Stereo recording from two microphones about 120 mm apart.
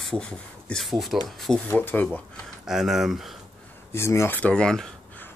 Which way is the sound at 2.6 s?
5° right (ahead or behind).